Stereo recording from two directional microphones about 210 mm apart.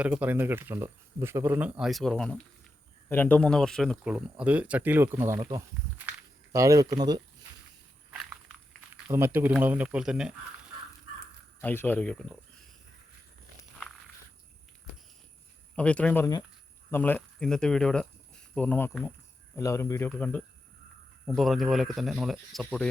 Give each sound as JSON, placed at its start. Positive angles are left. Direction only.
{"t": 0.0, "sound": "speech", "side_deg": -5}
{"t": 9.0, "sound": "speech", "side_deg": -10}
{"t": 11.6, "sound": "a man's voice", "side_deg": 10}
{"t": 15.7, "sound": "a man's voice", "side_deg": 5}